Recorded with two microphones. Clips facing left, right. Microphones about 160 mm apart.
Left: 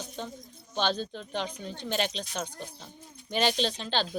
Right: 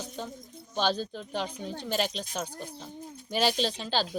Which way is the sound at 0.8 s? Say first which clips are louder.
Right 1 dB; 5° right (ahead or behind).